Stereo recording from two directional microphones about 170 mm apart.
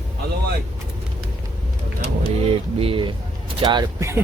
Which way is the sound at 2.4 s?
35° right (ahead or behind).